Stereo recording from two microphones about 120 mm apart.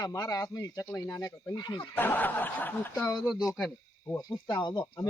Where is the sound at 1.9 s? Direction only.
15° left (ahead or behind).